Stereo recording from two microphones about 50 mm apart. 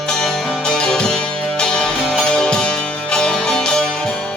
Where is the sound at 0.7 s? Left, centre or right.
Centre.